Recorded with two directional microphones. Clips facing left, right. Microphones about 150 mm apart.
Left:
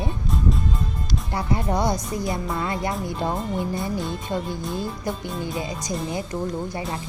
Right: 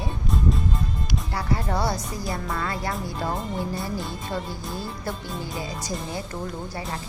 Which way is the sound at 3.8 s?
Centre (ahead or behind).